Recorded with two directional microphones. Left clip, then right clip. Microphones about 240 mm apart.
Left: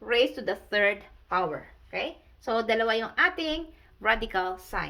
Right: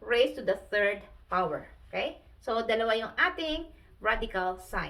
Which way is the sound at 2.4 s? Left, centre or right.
Left.